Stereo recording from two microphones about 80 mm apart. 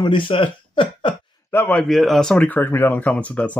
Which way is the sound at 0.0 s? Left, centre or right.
Left.